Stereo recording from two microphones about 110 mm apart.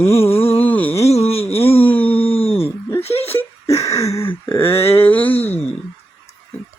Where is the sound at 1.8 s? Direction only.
15° left (ahead or behind).